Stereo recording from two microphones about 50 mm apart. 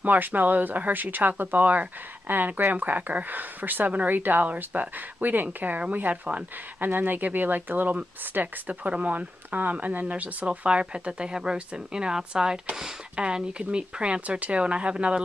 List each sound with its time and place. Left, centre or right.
0.0 s speech: right